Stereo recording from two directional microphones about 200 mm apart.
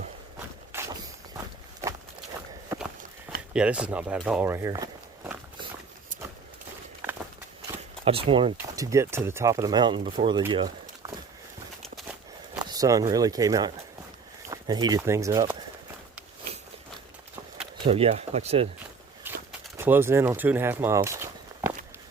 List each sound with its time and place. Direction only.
0.7 s walk: 15° right (ahead or behind)
3.5 s speech: 5° right (ahead or behind)
8.0 s speech: 25° right (ahead or behind)
10.5 s a sound: 25° right (ahead or behind)
11.8 s walk: centre (ahead or behind)
12.5 s speech: 20° right (ahead or behind)
17.7 s speech: 30° right (ahead or behind)
19.3 s a sound: 10° right (ahead or behind)
19.7 s speech: 10° right (ahead or behind)